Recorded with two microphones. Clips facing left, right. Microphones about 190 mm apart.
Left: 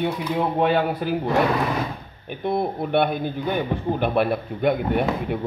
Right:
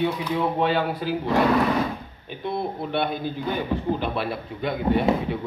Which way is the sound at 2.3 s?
55° left (ahead or behind).